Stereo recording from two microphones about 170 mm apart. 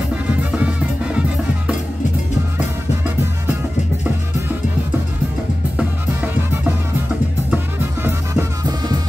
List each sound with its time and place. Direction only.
0.4 s music: 10° right (ahead or behind)
7.5 s music: 15° right (ahead or behind)